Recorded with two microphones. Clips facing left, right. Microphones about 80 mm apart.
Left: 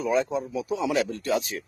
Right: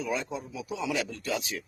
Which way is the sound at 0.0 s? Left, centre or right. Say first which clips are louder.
Left 8 dB; left.